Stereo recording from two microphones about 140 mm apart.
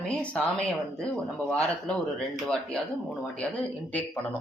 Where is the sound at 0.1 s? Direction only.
5° left (ahead or behind).